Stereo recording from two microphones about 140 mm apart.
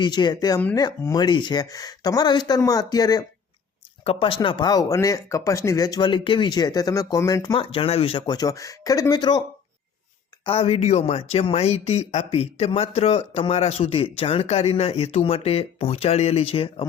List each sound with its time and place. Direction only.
0.0 s speech: 30° left (ahead or behind)
4.0 s speech: 40° left (ahead or behind)
7.6 s speech: 40° left (ahead or behind)
8.3 s speech: 25° left (ahead or behind)
10.4 s speech: 45° left (ahead or behind)